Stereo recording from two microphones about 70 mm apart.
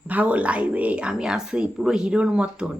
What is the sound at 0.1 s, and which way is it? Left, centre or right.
Speech, right.